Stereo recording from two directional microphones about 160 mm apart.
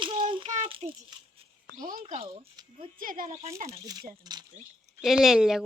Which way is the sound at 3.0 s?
60° right (ahead or behind).